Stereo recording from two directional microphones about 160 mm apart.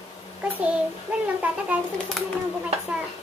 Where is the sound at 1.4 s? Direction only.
10° right (ahead or behind).